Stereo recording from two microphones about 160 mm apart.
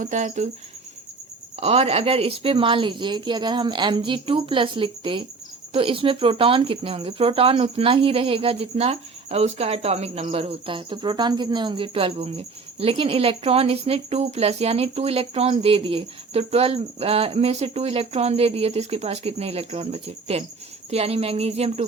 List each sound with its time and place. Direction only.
0.0 s speech: 50° right (ahead or behind)
1.5 s speech: 40° right (ahead or behind)